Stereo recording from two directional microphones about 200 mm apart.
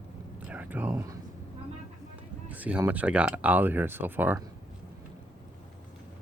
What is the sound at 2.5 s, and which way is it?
Speech, 10° right (ahead or behind).